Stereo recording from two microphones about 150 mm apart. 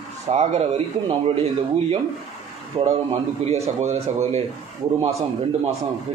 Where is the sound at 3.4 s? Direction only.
45° right (ahead or behind).